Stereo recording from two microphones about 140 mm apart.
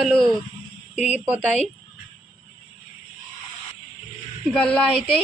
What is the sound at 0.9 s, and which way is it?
Speech, 55° left (ahead or behind).